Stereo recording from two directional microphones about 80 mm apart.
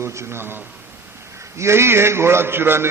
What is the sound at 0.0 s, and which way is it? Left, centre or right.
A man's voice, right.